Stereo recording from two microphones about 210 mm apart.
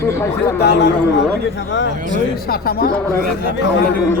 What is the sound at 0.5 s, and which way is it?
Speech, 50° left (ahead or behind).